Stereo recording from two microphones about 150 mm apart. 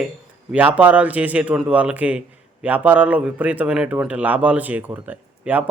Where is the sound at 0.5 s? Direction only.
10° right (ahead or behind).